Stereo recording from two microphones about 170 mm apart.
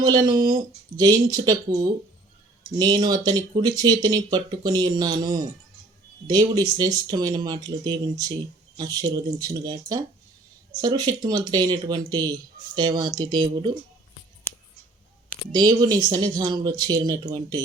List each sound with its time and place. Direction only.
0.0 s speech: 20° right (ahead or behind)
15.5 s speech: 25° right (ahead or behind)